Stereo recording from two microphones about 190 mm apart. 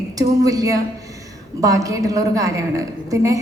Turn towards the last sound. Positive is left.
turn(degrees=-15)  # may be behind; listen again after turning